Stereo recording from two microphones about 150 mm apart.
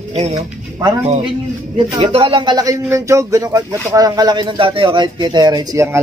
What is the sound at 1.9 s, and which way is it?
Speech, 40° right (ahead or behind).